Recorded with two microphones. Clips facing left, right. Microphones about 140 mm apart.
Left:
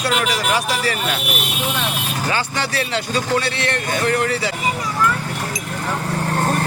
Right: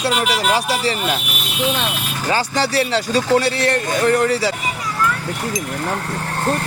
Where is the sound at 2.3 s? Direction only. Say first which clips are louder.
Right 6 dB; 35° right (ahead or behind).